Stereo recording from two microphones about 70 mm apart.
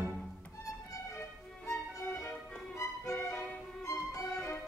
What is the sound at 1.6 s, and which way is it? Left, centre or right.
Music, left.